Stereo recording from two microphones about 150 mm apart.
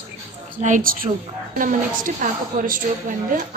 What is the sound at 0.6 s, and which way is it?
A woman's voice, 65° right (ahead or behind).